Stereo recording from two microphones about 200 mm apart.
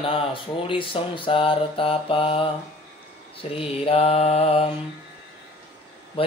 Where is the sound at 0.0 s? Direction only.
25° left (ahead or behind).